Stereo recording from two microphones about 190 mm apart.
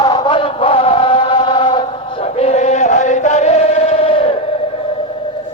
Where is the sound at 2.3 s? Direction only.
35° left (ahead or behind).